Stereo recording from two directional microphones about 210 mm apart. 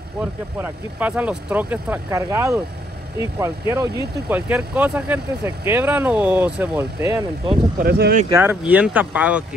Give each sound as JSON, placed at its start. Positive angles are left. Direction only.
{"t": 0.2, "sound": "speech", "side_deg": -10}
{"t": 7.8, "sound": "speech", "side_deg": -45}
{"t": 8.3, "sound": "speech", "side_deg": -10}